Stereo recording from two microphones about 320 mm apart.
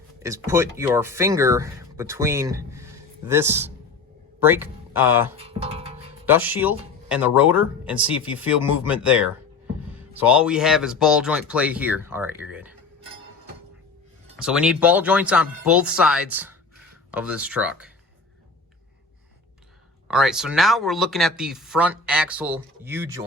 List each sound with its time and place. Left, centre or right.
0.2 s speech: centre
5.4 s speech: centre
6.2 s speech: centre
14.3 s speech: centre
20.1 s speech: centre